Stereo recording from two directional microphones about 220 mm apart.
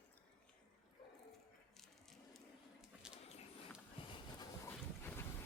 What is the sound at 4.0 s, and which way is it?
Boat, 25° left (ahead or behind).